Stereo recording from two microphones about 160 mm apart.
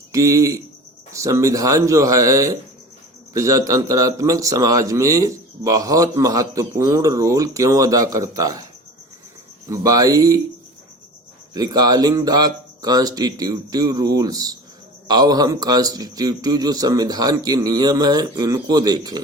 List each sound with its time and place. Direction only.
0.1 s speech: 20° right (ahead or behind)
9.6 s speech: 20° right (ahead or behind)
11.5 s speech: 25° right (ahead or behind)